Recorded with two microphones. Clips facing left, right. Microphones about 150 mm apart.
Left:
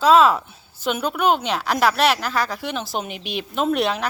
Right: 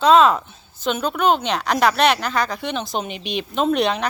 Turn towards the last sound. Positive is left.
turn(degrees=5)  # may be behind; listen again after turning